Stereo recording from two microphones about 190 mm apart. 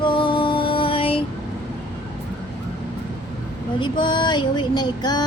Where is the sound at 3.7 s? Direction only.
25° left (ahead or behind).